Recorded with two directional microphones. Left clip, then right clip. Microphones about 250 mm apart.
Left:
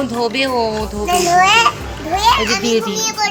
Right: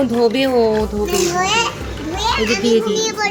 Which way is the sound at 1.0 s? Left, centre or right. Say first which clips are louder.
Left 9 dB; left.